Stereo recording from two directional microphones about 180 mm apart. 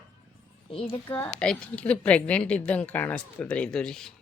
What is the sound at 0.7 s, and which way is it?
Speech, 30° left (ahead or behind).